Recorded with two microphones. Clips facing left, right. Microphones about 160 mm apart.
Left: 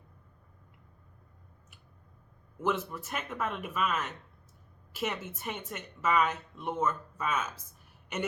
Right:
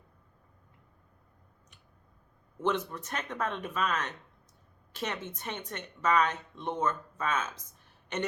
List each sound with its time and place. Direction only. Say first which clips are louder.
2.6 s a woman's voice: right 1 dB; 5° left (ahead or behind)